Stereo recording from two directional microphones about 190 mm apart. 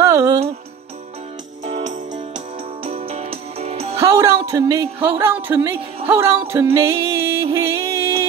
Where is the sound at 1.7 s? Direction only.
40° right (ahead or behind).